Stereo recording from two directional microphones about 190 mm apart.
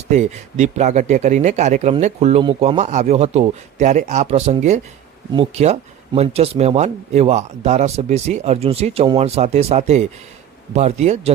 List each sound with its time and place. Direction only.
0.1 s speech: 35° right (ahead or behind)
5.3 s speech: 25° right (ahead or behind)